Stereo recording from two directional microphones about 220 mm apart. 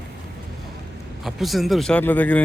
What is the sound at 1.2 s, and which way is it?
A man's voice, centre (ahead or behind).